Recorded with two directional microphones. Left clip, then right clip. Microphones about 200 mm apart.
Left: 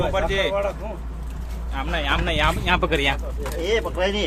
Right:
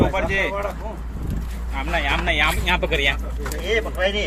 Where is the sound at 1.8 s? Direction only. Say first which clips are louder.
Right 1 dB; 20° left (ahead or behind).